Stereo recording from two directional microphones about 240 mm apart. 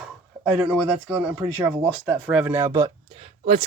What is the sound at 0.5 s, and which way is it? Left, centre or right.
Speech, centre.